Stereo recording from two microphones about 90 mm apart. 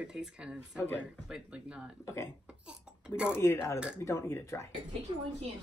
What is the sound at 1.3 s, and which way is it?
Speech, 10° right (ahead or behind).